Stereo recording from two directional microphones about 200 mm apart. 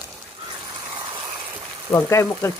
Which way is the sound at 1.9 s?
15° left (ahead or behind).